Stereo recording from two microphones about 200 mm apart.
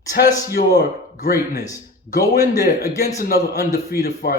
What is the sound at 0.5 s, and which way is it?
Speech, 45° left (ahead or behind).